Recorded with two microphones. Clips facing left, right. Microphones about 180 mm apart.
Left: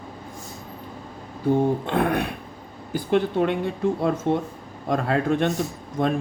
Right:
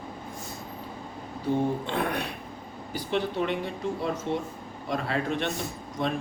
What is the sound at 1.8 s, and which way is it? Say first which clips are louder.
A man's voice: left 6 dB; 55° left (ahead or behind).